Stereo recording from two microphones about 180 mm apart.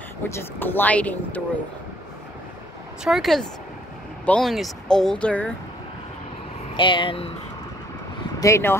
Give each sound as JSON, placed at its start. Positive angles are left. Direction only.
{"t": 0.3, "sound": "speech", "side_deg": 10}
{"t": 3.0, "sound": "speech", "side_deg": 0}
{"t": 6.8, "sound": "speech", "side_deg": 25}
{"t": 8.4, "sound": "speech", "side_deg": 15}